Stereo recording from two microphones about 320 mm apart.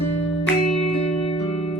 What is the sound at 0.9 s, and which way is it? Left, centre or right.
Music, centre.